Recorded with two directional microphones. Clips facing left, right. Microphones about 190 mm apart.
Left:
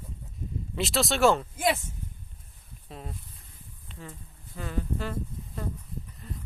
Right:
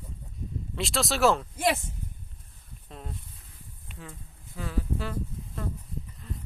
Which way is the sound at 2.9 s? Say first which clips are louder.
Left 1 dB; centre (ahead or behind).